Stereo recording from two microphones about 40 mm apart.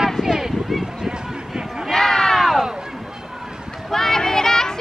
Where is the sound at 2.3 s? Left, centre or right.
Centre.